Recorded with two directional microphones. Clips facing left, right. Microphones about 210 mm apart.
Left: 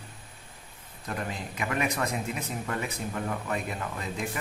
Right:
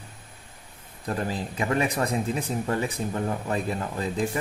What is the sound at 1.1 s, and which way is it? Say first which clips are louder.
A man's voice: right 5 dB; 30° right (ahead or behind).